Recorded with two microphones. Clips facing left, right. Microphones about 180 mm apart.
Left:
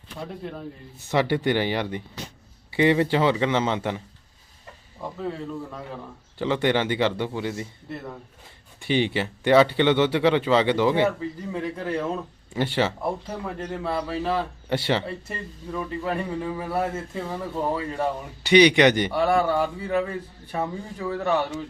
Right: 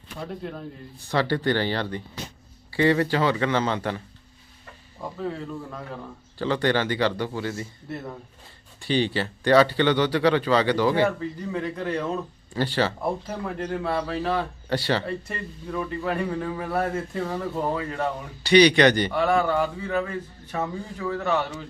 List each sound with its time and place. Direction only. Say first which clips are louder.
0.2 s speech: right 1 dB; centre (ahead or behind)
0.9 s a man's voice: left 2 dB; 20° left (ahead or behind)
4.9 s speech: even; centre (ahead or behind)
6.4 s speech: left 1 dB; 20° left (ahead or behind)
8.8 s speech: left 1 dB; 20° left (ahead or behind)
11.5 s a man's voice: even; 5° left (ahead or behind)
12.5 s speech: even; 20° left (ahead or behind)
13.0 s speech: right 1 dB; centre (ahead or behind)
14.7 s speech: left 1 dB; 20° left (ahead or behind)
15.0 s speech: right 2 dB; 5° left (ahead or behind)
17.9 s a man's voice: left 1 dB; 15° left (ahead or behind)
19.2 s a man's voice: left 1 dB; 5° left (ahead or behind)